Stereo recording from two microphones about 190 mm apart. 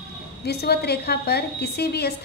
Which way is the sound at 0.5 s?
60° left (ahead or behind).